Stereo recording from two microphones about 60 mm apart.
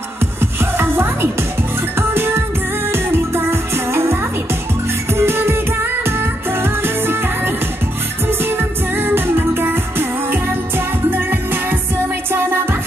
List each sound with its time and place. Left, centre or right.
0.2 s music: right